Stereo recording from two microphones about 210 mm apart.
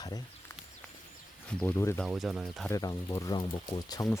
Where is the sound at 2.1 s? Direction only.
Centre (ahead or behind).